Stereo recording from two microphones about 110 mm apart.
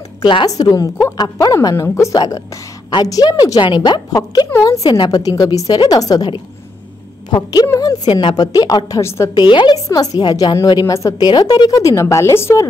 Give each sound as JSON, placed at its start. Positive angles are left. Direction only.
{"t": 0.2, "sound": "a woman's voice", "side_deg": 50}
{"t": 0.5, "sound": "a woman's voice", "side_deg": 35}
{"t": 4.5, "sound": "a woman's voice", "side_deg": 25}
{"t": 7.6, "sound": "a woman's voice", "side_deg": 30}
{"t": 9.4, "sound": "a woman's voice", "side_deg": 45}
{"t": 9.8, "sound": "a woman's voice", "side_deg": 35}